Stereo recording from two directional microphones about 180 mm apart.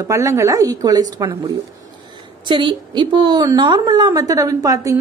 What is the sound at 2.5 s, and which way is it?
A woman's voice, 25° right (ahead or behind).